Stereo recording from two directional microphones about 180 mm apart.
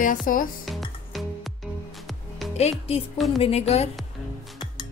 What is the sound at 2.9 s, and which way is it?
Speech, 35° left (ahead or behind).